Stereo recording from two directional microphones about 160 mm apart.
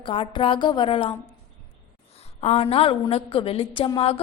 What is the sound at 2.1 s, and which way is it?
A woman's voice, 40° left (ahead or behind).